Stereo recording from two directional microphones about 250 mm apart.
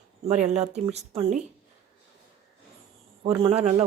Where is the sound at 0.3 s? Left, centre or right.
Right.